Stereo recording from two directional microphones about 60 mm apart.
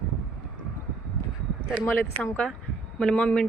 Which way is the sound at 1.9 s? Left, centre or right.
Left.